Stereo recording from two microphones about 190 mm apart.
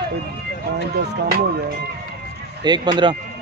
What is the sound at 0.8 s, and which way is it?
Speech, 60° right (ahead or behind).